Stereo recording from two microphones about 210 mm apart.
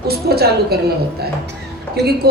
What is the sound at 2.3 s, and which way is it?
Speech, 50° right (ahead or behind).